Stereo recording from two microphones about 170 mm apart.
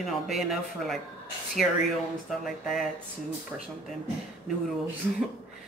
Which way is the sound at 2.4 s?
Centre (ahead or behind).